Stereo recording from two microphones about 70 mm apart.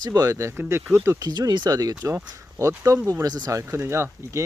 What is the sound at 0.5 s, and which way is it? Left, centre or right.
Speech, right.